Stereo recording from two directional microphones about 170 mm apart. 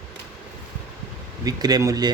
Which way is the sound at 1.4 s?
20° right (ahead or behind).